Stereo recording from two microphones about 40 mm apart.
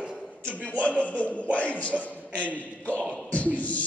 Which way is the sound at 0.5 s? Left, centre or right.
Left.